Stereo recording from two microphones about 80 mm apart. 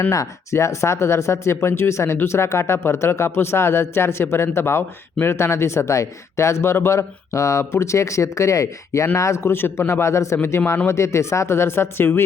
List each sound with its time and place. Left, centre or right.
0.1 s speech: left